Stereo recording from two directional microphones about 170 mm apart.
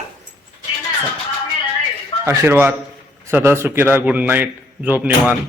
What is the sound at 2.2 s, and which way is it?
A man's voice, 15° right (ahead or behind).